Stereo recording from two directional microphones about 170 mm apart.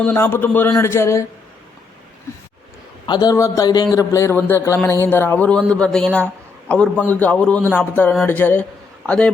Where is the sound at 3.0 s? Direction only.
25° left (ahead or behind).